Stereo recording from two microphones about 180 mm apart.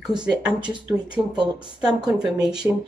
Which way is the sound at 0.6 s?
25° right (ahead or behind).